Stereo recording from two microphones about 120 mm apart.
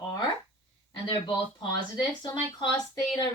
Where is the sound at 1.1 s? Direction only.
40° left (ahead or behind).